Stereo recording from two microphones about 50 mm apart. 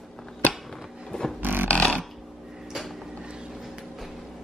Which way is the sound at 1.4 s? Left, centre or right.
Right.